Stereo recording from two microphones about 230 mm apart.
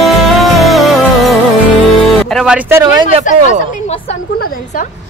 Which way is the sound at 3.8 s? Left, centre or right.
Left.